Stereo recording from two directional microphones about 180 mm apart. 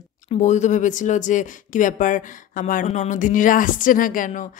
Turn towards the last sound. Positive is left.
turn(degrees=45)  # may be behind; listen again after turning